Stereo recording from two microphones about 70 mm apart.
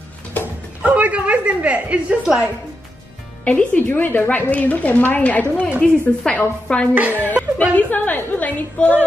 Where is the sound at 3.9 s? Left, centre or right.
Left.